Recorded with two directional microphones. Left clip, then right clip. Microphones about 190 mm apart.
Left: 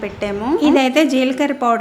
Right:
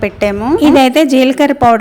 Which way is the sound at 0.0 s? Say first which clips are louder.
Right 9 dB; 35° right (ahead or behind).